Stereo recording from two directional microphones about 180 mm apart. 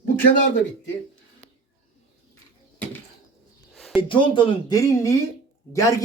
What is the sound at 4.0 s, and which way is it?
Speech, 30° left (ahead or behind).